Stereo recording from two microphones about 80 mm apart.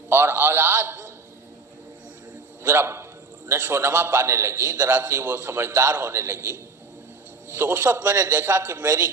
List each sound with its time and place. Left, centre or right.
0.1 s a man's voice: right
2.6 s a man's voice: right
7.6 s a man's voice: right